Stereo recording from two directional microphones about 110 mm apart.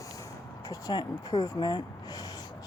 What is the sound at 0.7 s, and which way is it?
Speech, 35° left (ahead or behind).